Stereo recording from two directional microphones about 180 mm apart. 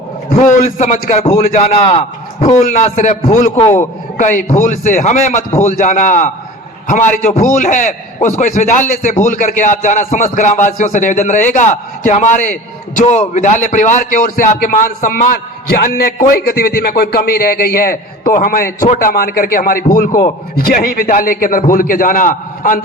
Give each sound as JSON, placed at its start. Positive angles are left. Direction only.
{"t": 0.3, "sound": "a man's voice", "side_deg": 45}